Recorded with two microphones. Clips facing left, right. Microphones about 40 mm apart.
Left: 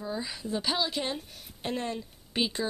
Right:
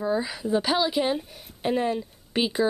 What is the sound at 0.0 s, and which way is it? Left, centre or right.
A woman's voice, right.